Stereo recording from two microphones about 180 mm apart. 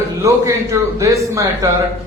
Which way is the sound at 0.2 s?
15° right (ahead or behind).